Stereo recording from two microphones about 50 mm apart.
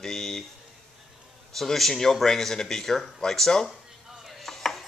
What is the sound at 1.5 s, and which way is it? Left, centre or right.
Speech, centre.